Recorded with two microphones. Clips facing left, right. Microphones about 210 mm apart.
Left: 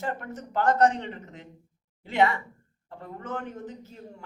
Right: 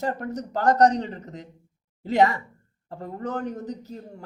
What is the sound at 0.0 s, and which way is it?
Speech, 40° right (ahead or behind).